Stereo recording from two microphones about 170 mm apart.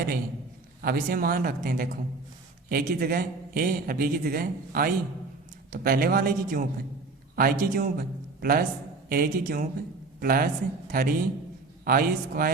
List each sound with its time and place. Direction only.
0.8 s a man's voice: 60° right (ahead or behind)